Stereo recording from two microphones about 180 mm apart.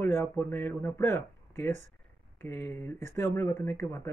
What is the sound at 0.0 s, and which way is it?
Speech, 15° left (ahead or behind).